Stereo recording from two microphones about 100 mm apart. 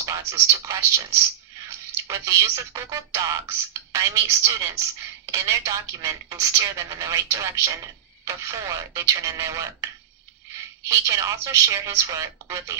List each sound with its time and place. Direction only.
0.0 s a woman's voice: 35° right (ahead or behind)
10.8 s a woman's voice: 30° right (ahead or behind)